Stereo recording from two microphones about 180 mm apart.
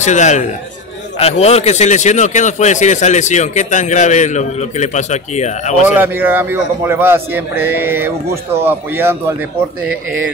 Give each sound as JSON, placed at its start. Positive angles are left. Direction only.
{"t": 0.0, "sound": "speech", "side_deg": 40}
{"t": 5.9, "sound": "a man's voice", "side_deg": -10}